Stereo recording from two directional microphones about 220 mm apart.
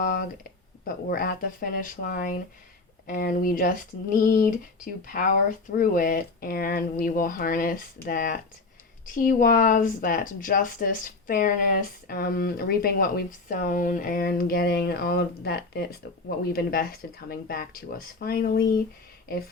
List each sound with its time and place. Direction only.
0.0 s speech: 40° left (ahead or behind)